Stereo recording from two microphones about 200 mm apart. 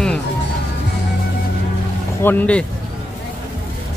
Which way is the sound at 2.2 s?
5° left (ahead or behind).